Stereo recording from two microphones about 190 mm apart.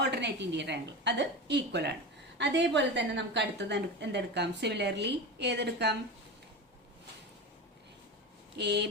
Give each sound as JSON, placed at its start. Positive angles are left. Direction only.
{"t": 0.0, "sound": "a woman's voice", "side_deg": -60}
{"t": 8.5, "sound": "a woman's voice", "side_deg": -60}